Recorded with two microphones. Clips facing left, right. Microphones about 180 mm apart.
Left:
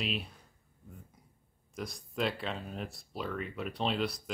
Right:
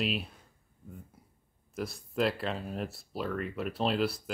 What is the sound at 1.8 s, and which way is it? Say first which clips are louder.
Speech: right 4 dB; 5° right (ahead or behind).